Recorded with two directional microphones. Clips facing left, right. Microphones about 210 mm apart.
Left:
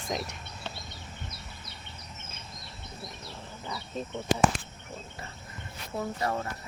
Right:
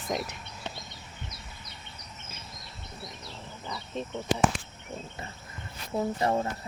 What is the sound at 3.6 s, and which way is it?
Insect, 5° left (ahead or behind).